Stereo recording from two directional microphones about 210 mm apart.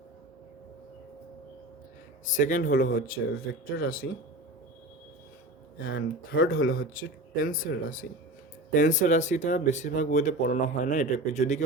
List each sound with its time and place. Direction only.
2.3 s speech: 35° left (ahead or behind)
5.8 s speech: 45° left (ahead or behind)
6.6 s speech: 75° left (ahead or behind)
6.9 s speech: 40° left (ahead or behind)